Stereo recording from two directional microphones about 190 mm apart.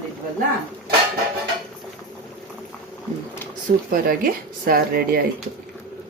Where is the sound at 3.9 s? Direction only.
50° right (ahead or behind).